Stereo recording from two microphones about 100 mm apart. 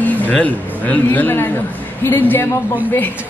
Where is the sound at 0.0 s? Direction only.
15° left (ahead or behind).